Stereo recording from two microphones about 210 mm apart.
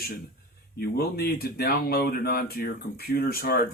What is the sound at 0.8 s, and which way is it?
Speech, 45° left (ahead or behind).